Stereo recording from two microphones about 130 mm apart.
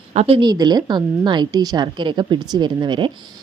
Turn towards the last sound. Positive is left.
turn(degrees=-35)  # may be behind; listen again after turning